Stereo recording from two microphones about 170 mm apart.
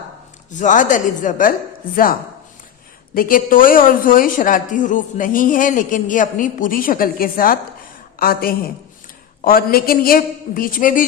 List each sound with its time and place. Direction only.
0.6 s a woman's voice: 50° left (ahead or behind)
3.2 s a woman's voice: 55° left (ahead or behind)